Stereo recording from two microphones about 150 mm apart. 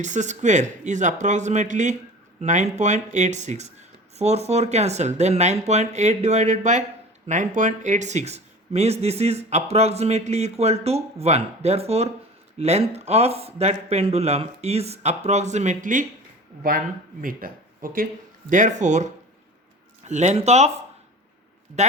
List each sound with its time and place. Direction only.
0.0 s speech: 55° right (ahead or behind)